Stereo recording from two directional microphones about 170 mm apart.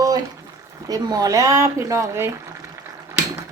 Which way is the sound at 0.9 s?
20° right (ahead or behind).